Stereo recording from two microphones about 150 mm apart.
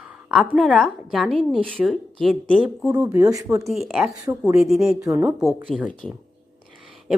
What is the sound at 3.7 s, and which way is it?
A woman's voice, centre (ahead or behind).